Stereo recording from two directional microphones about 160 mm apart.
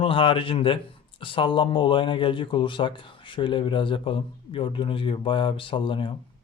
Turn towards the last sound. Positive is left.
turn(degrees=30)  # may be behind; listen again after turning